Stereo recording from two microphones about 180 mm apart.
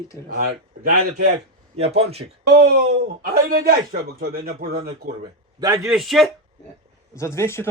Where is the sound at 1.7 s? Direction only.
35° right (ahead or behind).